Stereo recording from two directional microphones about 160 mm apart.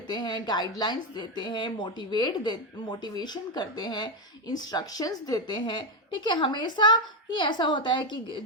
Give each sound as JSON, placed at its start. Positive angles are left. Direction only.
{"t": 0.1, "sound": "speech", "side_deg": 25}